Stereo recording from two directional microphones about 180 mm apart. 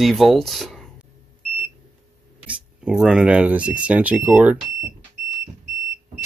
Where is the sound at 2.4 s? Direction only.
5° right (ahead or behind).